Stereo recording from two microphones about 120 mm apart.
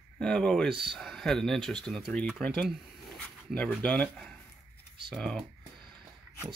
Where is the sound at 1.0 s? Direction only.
Centre (ahead or behind).